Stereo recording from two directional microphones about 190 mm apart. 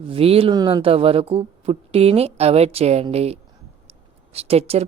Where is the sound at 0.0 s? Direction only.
30° right (ahead or behind).